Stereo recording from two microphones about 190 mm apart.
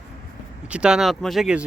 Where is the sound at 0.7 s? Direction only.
5° right (ahead or behind).